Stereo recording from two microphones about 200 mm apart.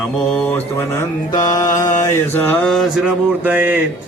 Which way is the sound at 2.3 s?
10° left (ahead or behind).